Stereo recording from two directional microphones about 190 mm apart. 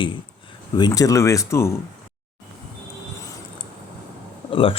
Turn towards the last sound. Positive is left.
turn(degrees=30)  # may be behind; listen again after turning